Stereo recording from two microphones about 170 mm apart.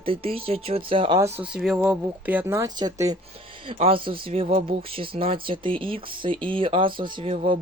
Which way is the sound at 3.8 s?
35° right (ahead or behind).